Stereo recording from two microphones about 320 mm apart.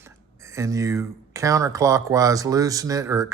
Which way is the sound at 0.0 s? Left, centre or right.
Centre.